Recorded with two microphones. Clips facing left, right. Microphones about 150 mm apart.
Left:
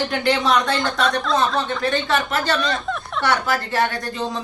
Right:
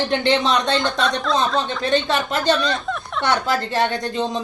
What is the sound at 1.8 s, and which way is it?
Speech, 20° right (ahead or behind).